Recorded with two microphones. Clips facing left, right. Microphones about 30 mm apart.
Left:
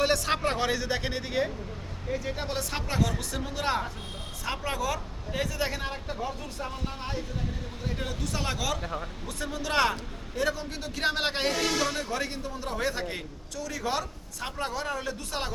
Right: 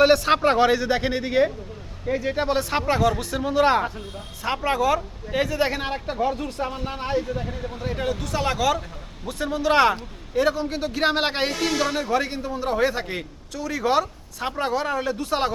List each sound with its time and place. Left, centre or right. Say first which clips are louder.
0.0 s a man's voice: right 9 dB; right
7.7 s speech: right 11 dB; right
9.4 s a man's voice: right 8 dB; right